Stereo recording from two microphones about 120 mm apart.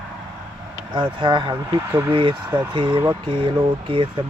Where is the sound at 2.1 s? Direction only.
45° right (ahead or behind).